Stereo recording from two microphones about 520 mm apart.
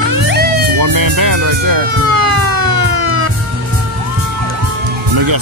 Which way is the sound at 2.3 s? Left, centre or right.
Right.